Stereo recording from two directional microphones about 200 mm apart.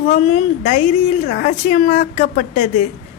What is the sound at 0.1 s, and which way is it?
Speech, 35° left (ahead or behind).